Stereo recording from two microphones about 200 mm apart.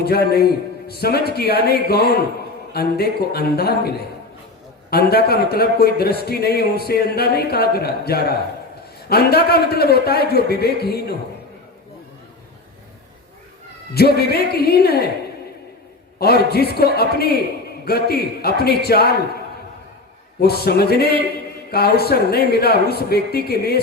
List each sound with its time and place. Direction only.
0.0 s a man's voice: 50° left (ahead or behind)
13.9 s a man's voice: 50° left (ahead or behind)
16.1 s a man's voice: 50° left (ahead or behind)
20.4 s a man's voice: 50° left (ahead or behind)